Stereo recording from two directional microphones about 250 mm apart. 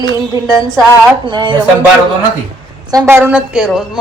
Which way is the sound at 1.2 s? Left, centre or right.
Centre.